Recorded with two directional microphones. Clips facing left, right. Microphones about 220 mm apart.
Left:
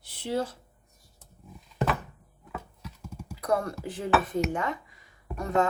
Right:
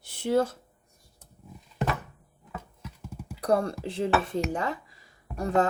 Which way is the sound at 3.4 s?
30° right (ahead or behind).